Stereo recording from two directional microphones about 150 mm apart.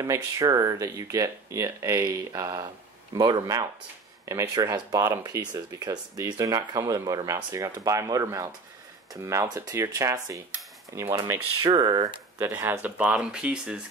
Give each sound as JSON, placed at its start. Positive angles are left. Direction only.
{"t": 0.0, "sound": "speech", "side_deg": -20}
{"t": 10.5, "sound": "cutlery", "side_deg": -20}
{"t": 11.6, "sound": "speech", "side_deg": -30}
{"t": 12.4, "sound": "speech", "side_deg": -15}